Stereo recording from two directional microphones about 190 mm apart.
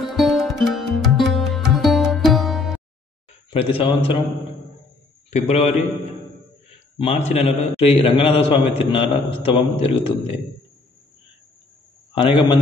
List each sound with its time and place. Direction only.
0.1 s music: centre (ahead or behind)
3.4 s speech: 30° left (ahead or behind)
5.3 s a man's voice: 35° left (ahead or behind)
7.0 s a man's voice: 35° left (ahead or behind)
12.1 s a man's voice: 25° left (ahead or behind)